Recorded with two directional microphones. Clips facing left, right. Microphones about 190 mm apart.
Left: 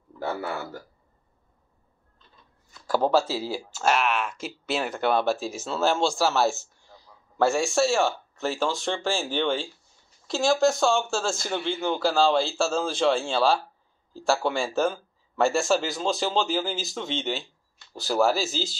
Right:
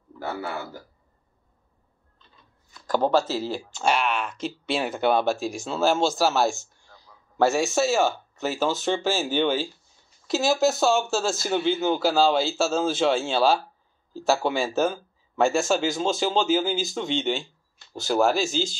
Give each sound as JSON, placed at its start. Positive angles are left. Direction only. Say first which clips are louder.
{"t": 2.9, "sound": "a man's voice", "louder": "right 1 dB", "side_deg": 10}